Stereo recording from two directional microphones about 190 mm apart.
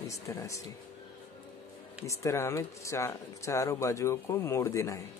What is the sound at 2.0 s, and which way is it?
Speech, 15° left (ahead or behind).